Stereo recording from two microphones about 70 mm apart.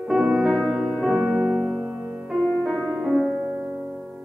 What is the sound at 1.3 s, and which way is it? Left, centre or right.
Piano, centre.